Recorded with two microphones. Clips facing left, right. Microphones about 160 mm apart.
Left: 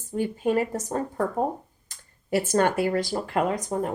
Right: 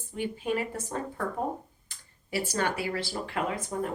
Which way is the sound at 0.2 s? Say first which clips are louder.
Left 6 dB; 45° left (ahead or behind).